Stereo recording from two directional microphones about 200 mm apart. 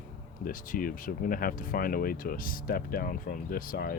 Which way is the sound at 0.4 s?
45° left (ahead or behind).